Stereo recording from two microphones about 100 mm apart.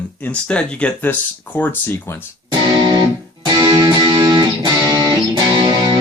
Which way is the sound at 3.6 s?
40° right (ahead or behind).